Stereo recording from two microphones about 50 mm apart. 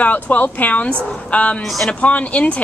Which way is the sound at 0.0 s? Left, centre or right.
Left.